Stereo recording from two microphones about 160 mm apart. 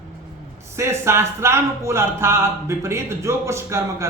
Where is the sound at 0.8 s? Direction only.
15° right (ahead or behind).